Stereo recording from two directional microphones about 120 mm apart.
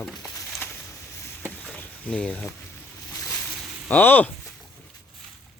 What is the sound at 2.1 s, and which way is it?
Speech, 10° left (ahead or behind).